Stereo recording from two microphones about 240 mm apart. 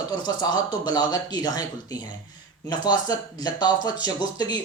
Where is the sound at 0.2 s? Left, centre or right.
Centre.